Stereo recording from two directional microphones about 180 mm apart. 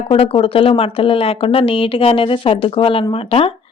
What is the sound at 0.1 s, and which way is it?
Speech, 30° left (ahead or behind).